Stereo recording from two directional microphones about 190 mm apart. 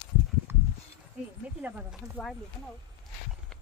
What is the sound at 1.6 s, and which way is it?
Speech, 10° right (ahead or behind).